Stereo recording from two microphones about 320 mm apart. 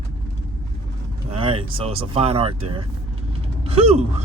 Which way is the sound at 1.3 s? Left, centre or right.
Centre.